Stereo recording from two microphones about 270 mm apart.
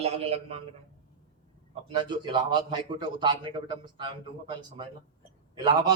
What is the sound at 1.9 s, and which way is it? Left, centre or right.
A man's voice, centre.